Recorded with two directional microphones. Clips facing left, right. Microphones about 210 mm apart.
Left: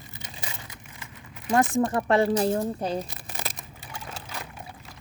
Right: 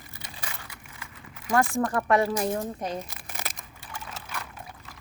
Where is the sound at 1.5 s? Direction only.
20° left (ahead or behind).